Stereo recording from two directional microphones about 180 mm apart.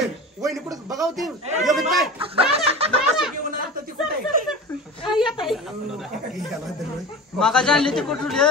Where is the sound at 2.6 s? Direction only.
35° right (ahead or behind).